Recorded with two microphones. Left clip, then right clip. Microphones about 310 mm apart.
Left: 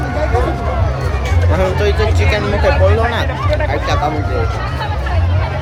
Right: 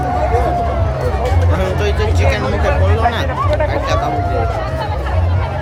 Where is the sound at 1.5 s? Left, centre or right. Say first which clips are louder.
Left 3 dB; centre.